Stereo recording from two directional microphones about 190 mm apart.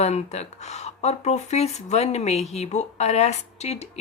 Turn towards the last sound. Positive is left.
turn(degrees=35)  # may be behind; listen again after turning